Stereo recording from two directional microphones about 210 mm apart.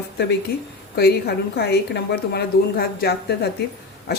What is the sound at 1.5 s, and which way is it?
Speech, 50° left (ahead or behind).